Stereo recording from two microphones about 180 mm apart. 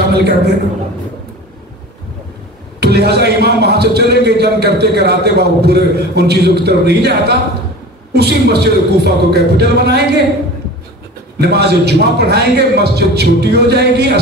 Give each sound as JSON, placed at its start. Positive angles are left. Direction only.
{"t": 0.1, "sound": "speech", "side_deg": -65}
{"t": 2.8, "sound": "speech", "side_deg": -65}
{"t": 11.3, "sound": "speech", "side_deg": -65}